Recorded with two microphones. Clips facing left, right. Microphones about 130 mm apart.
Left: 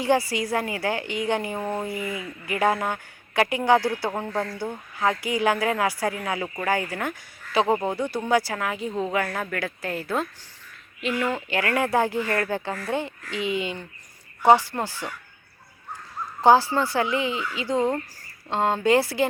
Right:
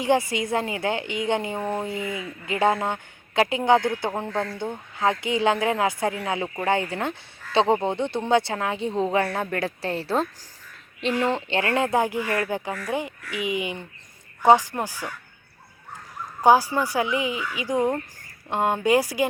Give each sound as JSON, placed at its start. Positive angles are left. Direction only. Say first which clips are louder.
{"t": 0.0, "sound": "a woman's voice", "louder": "even", "side_deg": -20}
{"t": 16.4, "sound": "speech", "louder": "even", "side_deg": -10}